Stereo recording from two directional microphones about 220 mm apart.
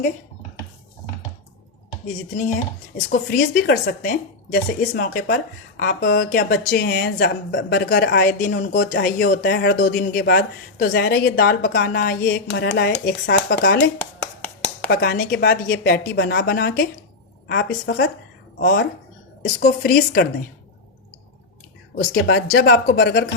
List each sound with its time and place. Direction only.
3.1 s a woman's voice: 40° left (ahead or behind)
14.4 s a sound: 10° left (ahead or behind)
14.8 s speech: 45° left (ahead or behind)
19.5 s a woman's voice: 40° left (ahead or behind)
21.9 s speech: 45° left (ahead or behind)